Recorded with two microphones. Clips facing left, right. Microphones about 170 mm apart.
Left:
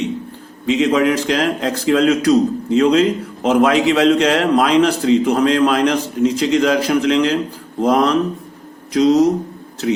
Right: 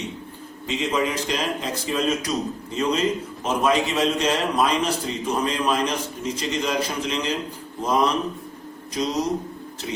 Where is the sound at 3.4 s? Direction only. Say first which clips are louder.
Left 8 dB; 90° left.